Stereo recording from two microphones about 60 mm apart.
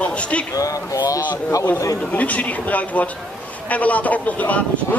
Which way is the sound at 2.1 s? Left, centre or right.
Left.